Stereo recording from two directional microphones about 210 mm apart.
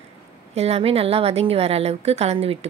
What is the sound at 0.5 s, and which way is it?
A woman's voice, 30° right (ahead or behind).